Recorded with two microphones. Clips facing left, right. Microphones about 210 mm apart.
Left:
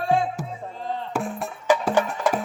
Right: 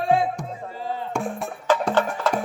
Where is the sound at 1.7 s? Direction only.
10° left (ahead or behind).